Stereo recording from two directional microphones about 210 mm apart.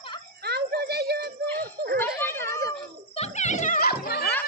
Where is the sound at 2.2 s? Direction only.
10° left (ahead or behind).